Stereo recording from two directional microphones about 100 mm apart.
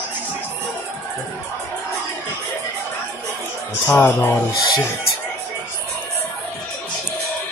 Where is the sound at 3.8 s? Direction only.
25° left (ahead or behind).